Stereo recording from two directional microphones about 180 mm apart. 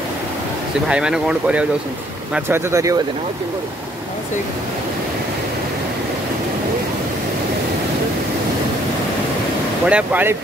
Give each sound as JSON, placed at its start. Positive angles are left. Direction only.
{"t": 0.8, "sound": "speech", "side_deg": -5}
{"t": 9.8, "sound": "speech", "side_deg": -10}